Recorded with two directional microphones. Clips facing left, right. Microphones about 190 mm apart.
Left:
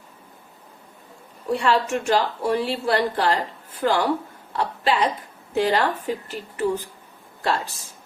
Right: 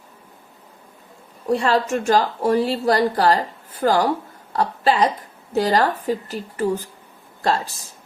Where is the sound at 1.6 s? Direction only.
40° right (ahead or behind).